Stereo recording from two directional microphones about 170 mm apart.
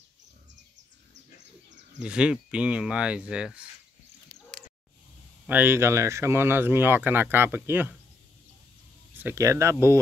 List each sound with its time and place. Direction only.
2.0 s speech: 5° right (ahead or behind)
5.5 s speech: 10° right (ahead or behind)
9.1 s speech: 15° right (ahead or behind)